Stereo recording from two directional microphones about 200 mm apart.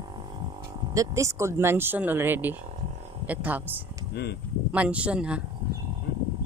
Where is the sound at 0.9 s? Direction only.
15° right (ahead or behind).